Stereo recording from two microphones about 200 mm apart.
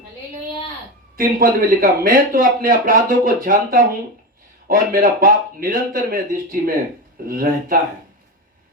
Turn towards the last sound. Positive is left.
turn(degrees=-45)  # may be behind; listen again after turning